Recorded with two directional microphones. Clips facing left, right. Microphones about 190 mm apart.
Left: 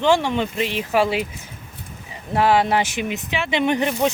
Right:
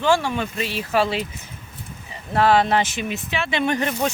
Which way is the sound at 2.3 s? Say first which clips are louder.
Even; 15° left (ahead or behind).